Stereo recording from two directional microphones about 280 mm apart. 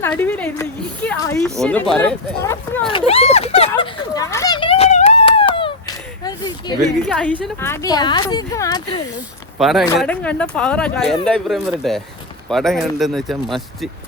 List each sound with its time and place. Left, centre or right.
0.0 s speech: centre
3.1 s a sound: left
6.8 s speech: centre
9.6 s speech: centre